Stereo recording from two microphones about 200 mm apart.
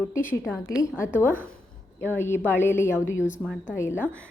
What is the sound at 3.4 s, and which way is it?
Speech, 5° right (ahead or behind).